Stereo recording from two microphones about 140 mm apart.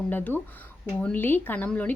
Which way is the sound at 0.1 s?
15° left (ahead or behind).